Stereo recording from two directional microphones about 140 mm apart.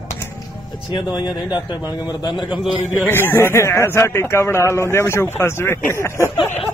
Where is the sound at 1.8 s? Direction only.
15° right (ahead or behind).